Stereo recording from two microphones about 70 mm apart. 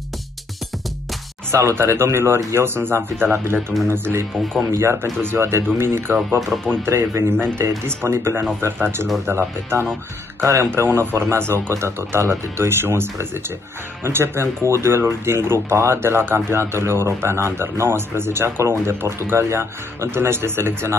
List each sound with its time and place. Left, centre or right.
1.5 s speech: right
6.5 s speech: centre
6.9 s speech: right
10.4 s speech: right